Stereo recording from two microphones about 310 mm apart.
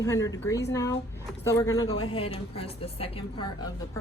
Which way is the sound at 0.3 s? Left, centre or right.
Centre.